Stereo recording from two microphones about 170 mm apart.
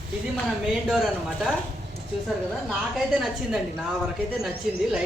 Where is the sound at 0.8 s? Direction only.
Centre (ahead or behind).